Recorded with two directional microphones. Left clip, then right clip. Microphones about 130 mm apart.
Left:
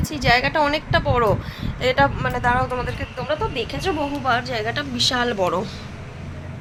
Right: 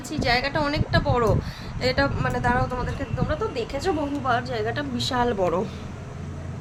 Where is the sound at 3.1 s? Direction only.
40° left (ahead or behind).